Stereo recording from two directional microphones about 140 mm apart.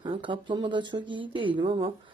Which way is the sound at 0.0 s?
35° right (ahead or behind).